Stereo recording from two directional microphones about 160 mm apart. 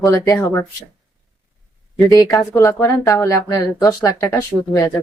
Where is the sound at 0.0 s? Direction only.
20° left (ahead or behind).